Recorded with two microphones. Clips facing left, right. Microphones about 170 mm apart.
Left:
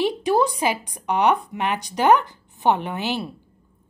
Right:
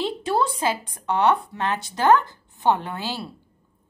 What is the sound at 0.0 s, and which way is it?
A woman's voice, 15° left (ahead or behind).